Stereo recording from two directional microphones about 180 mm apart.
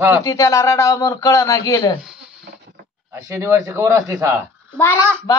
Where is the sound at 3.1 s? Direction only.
15° right (ahead or behind).